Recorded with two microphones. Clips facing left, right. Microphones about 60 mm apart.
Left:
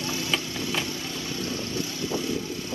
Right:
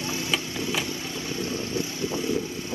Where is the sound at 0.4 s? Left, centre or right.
Right.